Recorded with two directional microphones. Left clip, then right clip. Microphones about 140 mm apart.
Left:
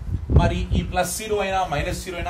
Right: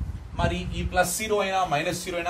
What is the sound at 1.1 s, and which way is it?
Speech, 35° right (ahead or behind).